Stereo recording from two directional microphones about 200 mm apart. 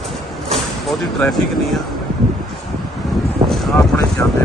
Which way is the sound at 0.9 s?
Centre (ahead or behind).